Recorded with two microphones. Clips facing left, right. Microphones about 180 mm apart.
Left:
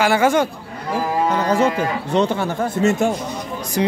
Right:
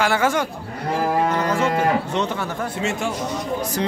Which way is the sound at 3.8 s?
15° left (ahead or behind).